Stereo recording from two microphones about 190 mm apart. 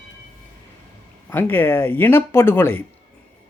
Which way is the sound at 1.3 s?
10° left (ahead or behind).